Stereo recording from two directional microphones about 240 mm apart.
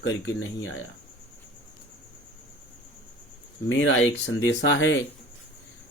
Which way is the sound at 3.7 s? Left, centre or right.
Left.